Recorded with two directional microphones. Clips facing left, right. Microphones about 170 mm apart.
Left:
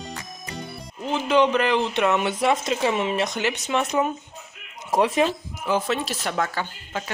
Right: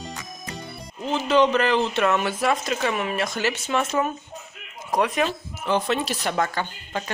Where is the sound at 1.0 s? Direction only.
15° left (ahead or behind).